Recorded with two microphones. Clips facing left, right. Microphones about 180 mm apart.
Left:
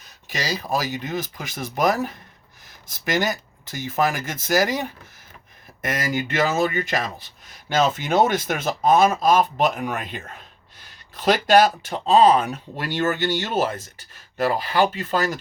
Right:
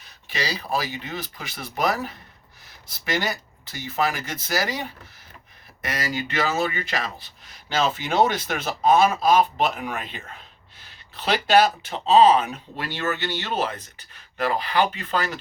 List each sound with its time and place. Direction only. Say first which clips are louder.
0.3 s speech: left 2 dB; 45° left (ahead or behind)